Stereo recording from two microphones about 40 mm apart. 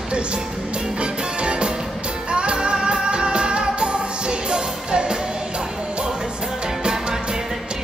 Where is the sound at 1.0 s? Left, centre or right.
Right.